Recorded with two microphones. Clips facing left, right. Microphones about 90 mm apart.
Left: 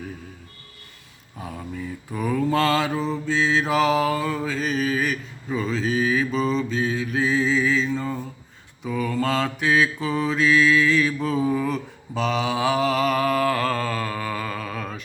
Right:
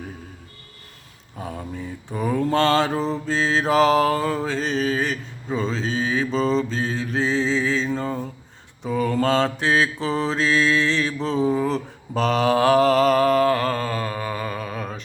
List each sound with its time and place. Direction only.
1.4 s mantra: 35° right (ahead or behind)